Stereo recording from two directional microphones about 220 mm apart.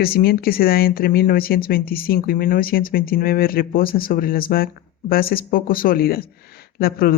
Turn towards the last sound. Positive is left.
turn(degrees=45)  # may be behind; listen again after turning